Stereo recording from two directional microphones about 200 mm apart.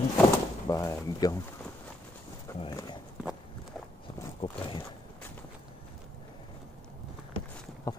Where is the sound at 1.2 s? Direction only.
20° left (ahead or behind).